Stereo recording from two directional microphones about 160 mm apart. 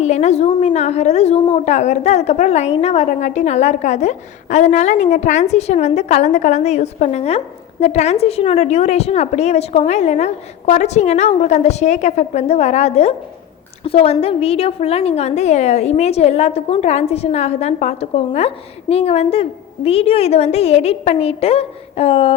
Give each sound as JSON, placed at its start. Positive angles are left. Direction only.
{"t": 0.0, "sound": "a woman's voice", "side_deg": 45}